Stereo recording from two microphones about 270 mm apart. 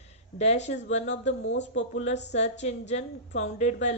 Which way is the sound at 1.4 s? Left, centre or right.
Left.